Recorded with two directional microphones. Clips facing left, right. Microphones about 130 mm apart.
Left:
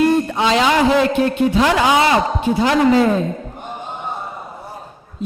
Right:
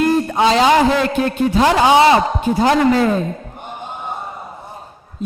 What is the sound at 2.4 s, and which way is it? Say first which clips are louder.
Speech: right 2 dB; 40° right (ahead or behind).